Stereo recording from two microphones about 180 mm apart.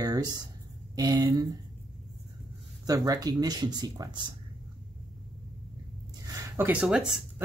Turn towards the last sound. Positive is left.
turn(degrees=-5)  # may be behind; listen again after turning